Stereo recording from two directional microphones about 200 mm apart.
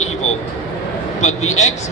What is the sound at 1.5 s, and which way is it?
Speech, 35° left (ahead or behind).